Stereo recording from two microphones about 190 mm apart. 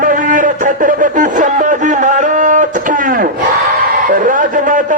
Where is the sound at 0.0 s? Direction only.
45° right (ahead or behind).